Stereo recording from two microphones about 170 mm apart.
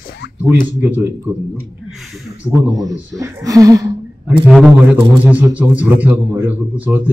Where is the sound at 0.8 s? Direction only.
10° right (ahead or behind).